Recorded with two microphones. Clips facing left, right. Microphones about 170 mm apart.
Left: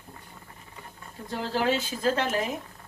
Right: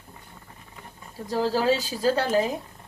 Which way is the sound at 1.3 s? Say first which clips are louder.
Right 4 dB; 35° right (ahead or behind).